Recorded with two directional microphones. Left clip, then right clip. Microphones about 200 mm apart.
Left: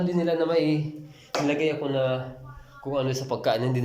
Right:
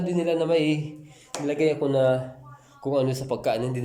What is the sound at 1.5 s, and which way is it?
Speech, 20° right (ahead or behind).